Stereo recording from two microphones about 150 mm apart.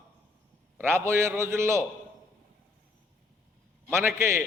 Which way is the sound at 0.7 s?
15° right (ahead or behind).